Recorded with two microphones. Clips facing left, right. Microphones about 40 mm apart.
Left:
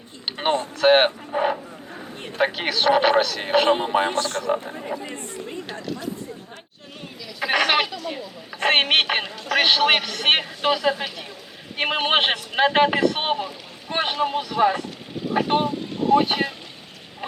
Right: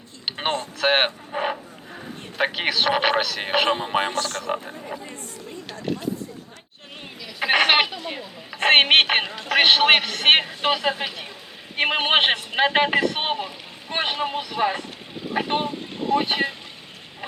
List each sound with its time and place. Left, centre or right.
0.3 s a sound: centre
0.8 s cattle: centre
2.4 s a man's voice: centre
3.9 s a man's voice: right
4.4 s speech: centre
5.1 s chatter: left
7.3 s a sound: right
8.5 s a man's voice: right; by 16.6 s centre